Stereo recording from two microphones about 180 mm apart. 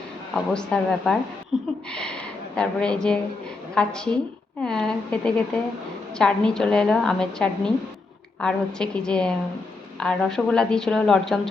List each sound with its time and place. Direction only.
0.3 s a woman's voice: 5° left (ahead or behind)